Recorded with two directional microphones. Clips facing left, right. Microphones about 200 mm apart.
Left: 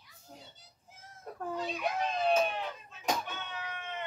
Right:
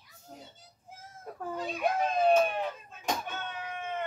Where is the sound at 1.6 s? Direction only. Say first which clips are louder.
Right 6 dB; 50° right (ahead or behind).